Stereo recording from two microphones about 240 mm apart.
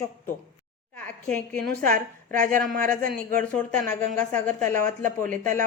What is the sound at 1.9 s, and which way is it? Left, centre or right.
A woman's voice, right.